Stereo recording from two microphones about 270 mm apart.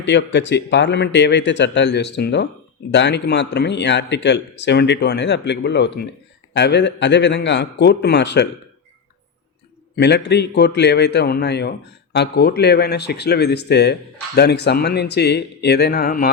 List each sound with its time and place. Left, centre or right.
0.0 s a man's voice: left
9.9 s a man's voice: left